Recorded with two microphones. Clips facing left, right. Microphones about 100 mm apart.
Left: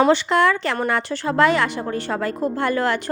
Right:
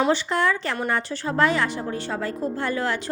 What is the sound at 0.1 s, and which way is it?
A woman's voice, 75° left (ahead or behind).